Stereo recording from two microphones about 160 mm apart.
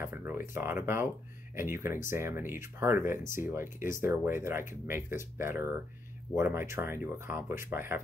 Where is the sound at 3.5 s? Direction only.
15° right (ahead or behind).